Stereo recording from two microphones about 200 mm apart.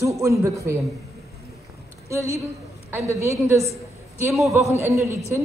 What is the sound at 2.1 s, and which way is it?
A man's voice, 15° right (ahead or behind).